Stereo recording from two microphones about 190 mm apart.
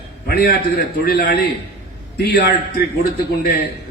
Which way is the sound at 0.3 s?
55° left (ahead or behind).